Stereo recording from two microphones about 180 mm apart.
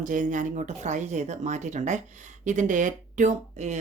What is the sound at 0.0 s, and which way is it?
Speech, 45° right (ahead or behind).